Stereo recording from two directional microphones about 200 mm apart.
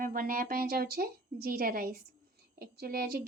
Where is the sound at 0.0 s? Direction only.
45° right (ahead or behind).